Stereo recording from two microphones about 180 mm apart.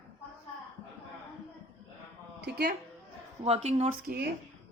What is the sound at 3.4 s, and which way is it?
Speech, 35° right (ahead or behind).